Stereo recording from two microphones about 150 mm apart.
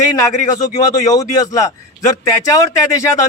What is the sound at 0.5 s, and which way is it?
A man's voice, 25° left (ahead or behind).